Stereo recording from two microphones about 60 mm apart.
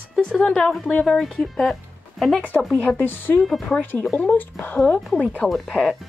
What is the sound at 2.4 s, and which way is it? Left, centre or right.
Speech, left.